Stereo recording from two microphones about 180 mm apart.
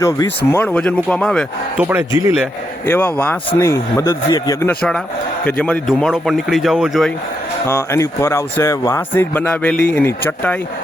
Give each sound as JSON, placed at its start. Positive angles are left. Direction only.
{"t": 0.0, "sound": "speech", "side_deg": 15}
{"t": 1.8, "sound": "speech", "side_deg": -10}
{"t": 2.8, "sound": "speech", "side_deg": 10}
{"t": 4.7, "sound": "a man's voice", "side_deg": 5}
{"t": 7.7, "sound": "speech", "side_deg": 15}